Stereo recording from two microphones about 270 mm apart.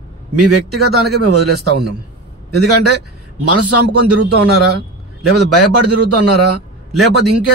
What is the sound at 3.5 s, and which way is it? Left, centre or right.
Speech, right.